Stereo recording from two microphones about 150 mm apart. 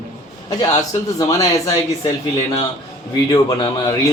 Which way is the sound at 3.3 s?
25° left (ahead or behind).